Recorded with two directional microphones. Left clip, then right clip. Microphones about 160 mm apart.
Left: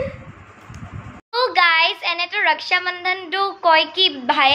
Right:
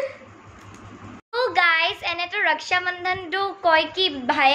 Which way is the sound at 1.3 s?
5° right (ahead or behind).